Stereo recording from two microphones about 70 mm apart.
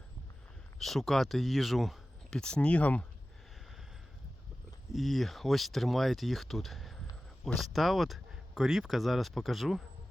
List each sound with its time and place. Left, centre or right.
0.8 s speech: centre
2.3 s speech: centre
4.9 s speech: centre